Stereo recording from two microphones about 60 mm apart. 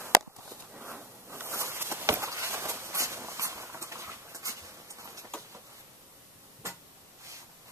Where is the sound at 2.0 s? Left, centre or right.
Right.